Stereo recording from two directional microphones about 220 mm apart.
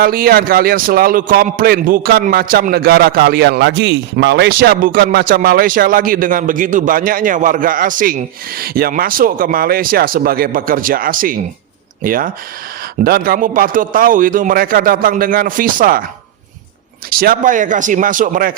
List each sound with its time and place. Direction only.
0.0 s a man's voice: 40° right (ahead or behind)
17.1 s a man's voice: 40° right (ahead or behind)